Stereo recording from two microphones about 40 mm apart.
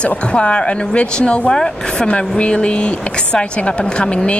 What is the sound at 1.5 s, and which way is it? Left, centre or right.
Speech, centre.